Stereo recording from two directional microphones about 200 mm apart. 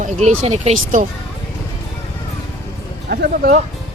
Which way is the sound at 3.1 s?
50° right (ahead or behind).